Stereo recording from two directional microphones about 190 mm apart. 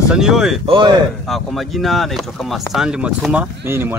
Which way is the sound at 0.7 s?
25° right (ahead or behind).